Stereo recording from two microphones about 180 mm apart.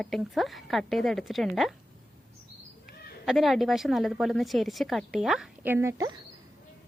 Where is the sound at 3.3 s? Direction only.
Centre (ahead or behind).